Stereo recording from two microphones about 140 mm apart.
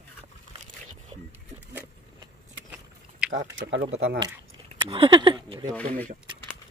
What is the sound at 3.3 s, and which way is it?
Speech, 80° right.